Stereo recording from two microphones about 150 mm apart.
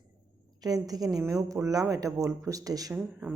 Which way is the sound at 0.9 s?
25° right (ahead or behind).